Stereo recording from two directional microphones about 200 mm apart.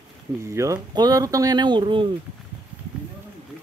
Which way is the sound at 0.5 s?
15° right (ahead or behind).